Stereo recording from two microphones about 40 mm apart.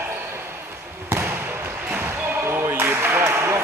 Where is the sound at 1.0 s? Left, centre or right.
Right.